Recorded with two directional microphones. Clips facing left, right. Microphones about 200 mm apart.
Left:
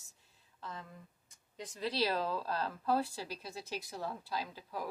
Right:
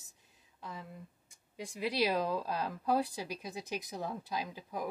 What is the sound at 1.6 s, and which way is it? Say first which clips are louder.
A woman's voice: right 2 dB; 10° right (ahead or behind).